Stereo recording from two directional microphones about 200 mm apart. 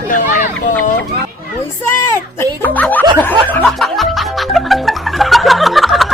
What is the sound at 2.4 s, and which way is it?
Music, 10° left (ahead or behind).